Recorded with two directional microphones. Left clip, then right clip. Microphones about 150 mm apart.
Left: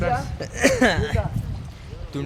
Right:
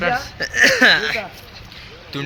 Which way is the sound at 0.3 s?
20° left (ahead or behind).